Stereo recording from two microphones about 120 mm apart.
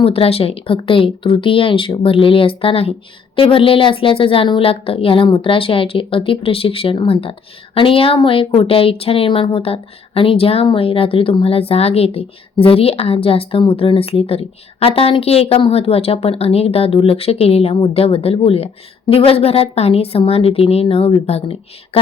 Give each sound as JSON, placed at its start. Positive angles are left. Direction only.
{"t": 0.0, "sound": "a woman's voice", "side_deg": 55}